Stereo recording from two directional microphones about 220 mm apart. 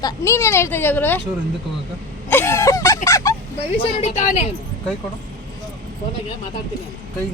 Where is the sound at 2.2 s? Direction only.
10° left (ahead or behind).